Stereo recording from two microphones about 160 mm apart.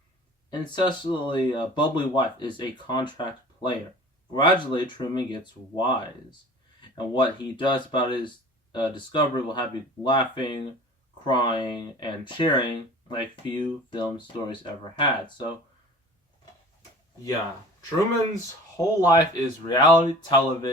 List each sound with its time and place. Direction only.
0.9 s speech: 30° left (ahead or behind)
18.8 s speech: 25° left (ahead or behind)